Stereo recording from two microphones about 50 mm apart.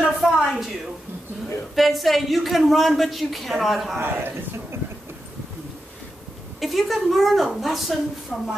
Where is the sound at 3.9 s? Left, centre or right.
Right.